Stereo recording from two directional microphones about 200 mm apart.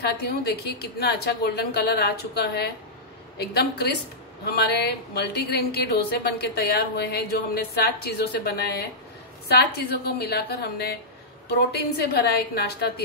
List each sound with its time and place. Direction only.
0.0 s a woman's voice: 55° left (ahead or behind)